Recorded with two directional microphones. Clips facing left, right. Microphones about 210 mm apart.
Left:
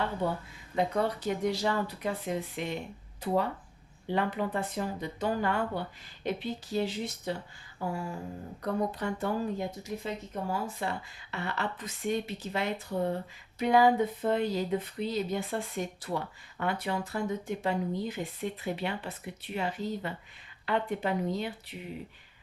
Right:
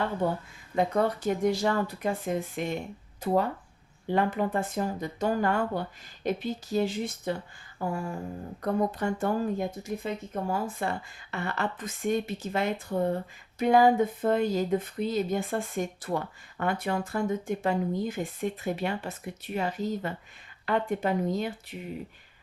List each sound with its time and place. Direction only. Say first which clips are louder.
0.2 s speech: right 3 dB; 50° right (ahead or behind)